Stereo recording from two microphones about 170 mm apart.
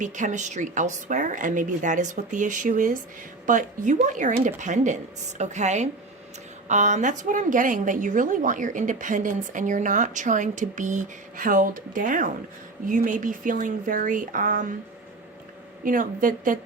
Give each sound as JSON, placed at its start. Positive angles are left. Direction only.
{"t": 0.0, "sound": "a woman's voice", "side_deg": -45}
{"t": 15.8, "sound": "a woman's voice", "side_deg": -55}